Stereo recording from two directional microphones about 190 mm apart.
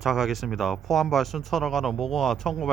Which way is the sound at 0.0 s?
Centre (ahead or behind).